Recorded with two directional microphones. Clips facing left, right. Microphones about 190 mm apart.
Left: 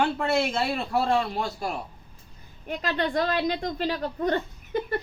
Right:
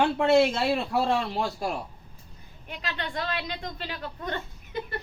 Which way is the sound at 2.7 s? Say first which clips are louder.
Left 8 dB; 45° left (ahead or behind).